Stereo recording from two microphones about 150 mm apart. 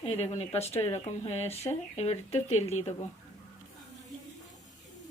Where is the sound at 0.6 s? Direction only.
45° left (ahead or behind).